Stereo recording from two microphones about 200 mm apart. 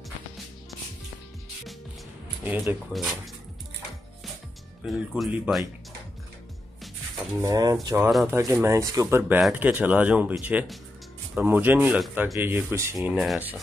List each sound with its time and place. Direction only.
2.4 s speech: 10° right (ahead or behind)
4.8 s speech: 5° right (ahead or behind)
7.4 s speech: 15° right (ahead or behind)